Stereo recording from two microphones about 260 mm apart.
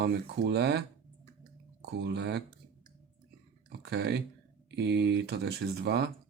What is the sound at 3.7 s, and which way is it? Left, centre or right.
Speech, right.